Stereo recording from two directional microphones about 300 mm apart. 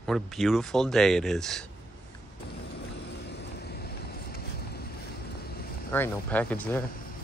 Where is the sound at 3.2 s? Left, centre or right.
Left.